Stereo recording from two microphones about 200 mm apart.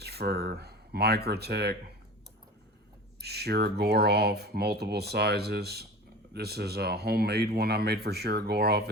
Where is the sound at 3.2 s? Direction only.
55° right (ahead or behind).